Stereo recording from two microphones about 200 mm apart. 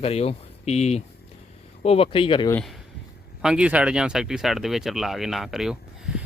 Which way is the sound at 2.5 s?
5° left (ahead or behind).